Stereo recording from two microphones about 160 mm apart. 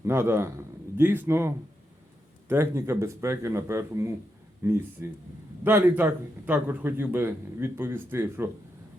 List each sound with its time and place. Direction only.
0.0 s a man's voice: 15° right (ahead or behind)